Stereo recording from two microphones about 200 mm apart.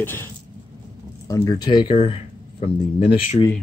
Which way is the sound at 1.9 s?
30° left (ahead or behind).